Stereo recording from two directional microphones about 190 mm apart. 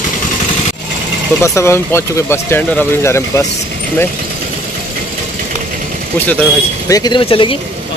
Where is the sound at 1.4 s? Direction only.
15° left (ahead or behind).